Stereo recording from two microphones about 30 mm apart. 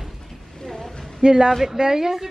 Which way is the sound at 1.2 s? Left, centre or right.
Right.